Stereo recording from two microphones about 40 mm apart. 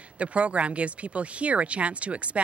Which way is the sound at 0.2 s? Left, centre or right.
Right.